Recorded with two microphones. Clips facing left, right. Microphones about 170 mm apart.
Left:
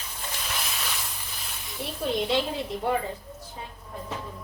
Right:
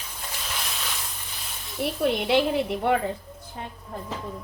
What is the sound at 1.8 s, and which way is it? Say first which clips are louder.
A woman's voice: right 4 dB; 65° right (ahead or behind).